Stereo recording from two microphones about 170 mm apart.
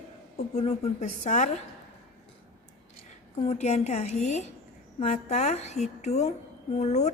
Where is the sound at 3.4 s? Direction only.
40° left (ahead or behind).